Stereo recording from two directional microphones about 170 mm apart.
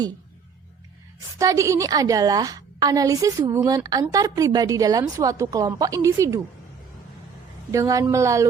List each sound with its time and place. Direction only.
1.4 s a woman's voice: 20° right (ahead or behind)
7.7 s speech: 20° right (ahead or behind)